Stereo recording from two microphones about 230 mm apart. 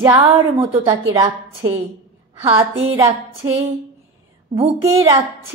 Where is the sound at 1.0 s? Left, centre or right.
Centre.